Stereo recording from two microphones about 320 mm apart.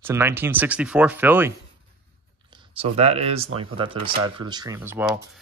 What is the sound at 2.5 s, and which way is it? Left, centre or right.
Speech, centre.